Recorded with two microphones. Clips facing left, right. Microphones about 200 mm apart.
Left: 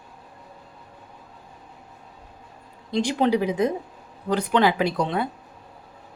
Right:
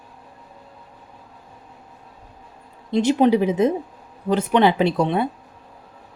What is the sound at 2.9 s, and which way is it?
Speech, 20° right (ahead or behind).